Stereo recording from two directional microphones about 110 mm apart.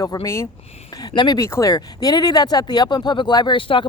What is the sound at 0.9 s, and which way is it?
Speech, 40° left (ahead or behind).